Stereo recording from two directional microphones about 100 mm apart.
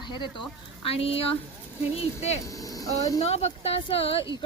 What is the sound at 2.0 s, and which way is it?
Speech, 90° left.